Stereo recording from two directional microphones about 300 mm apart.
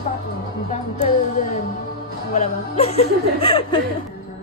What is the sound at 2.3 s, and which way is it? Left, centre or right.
Speech, left.